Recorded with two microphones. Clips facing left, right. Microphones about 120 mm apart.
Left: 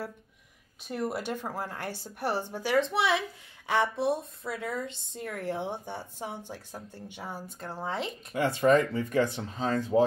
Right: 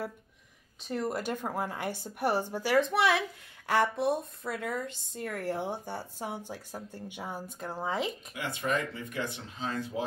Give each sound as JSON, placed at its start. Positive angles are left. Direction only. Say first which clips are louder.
{"t": 0.8, "sound": "a woman's voice", "louder": "even", "side_deg": 5}
{"t": 8.3, "sound": "speech", "louder": "left 9 dB", "side_deg": 40}